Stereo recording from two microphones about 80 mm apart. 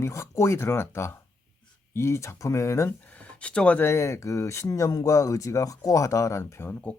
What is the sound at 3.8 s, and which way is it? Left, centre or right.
Speech, left.